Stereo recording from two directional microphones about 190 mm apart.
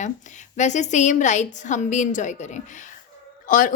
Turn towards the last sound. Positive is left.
turn(degrees=45)  # may be behind; listen again after turning